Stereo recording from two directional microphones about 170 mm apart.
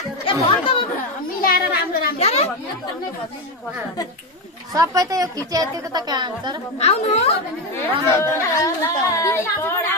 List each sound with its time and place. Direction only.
0.3 s speech: 30° left (ahead or behind)
1.4 s children playing: 65° left (ahead or behind)
2.1 s chatter: 40° left (ahead or behind)
4.7 s a woman's voice: 20° right (ahead or behind)
6.8 s a woman's voice: 40° left (ahead or behind)
8.1 s speech: 15° left (ahead or behind)